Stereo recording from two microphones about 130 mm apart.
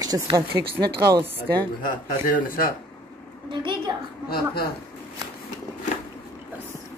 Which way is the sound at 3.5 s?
35° right (ahead or behind).